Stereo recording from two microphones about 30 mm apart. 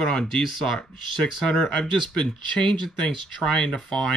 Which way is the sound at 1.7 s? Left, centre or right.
Left.